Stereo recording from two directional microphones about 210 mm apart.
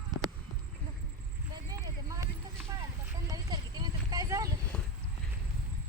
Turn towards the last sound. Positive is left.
turn(degrees=-15)  # may be behind; listen again after turning